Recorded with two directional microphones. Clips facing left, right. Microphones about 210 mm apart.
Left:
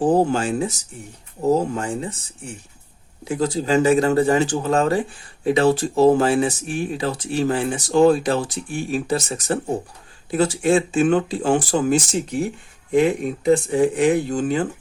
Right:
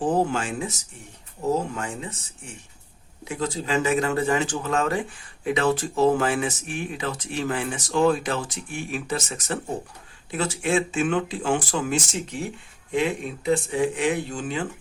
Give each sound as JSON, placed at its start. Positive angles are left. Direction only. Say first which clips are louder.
{"t": 0.0, "sound": "speech", "louder": "left 5 dB", "side_deg": 35}
{"t": 3.2, "sound": "speech", "louder": "left 7 dB", "side_deg": 35}